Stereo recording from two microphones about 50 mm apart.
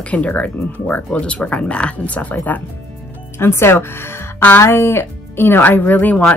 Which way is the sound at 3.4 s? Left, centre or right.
Left.